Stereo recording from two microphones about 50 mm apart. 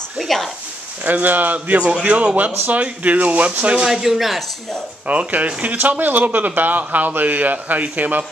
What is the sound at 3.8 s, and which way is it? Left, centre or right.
Speech, centre.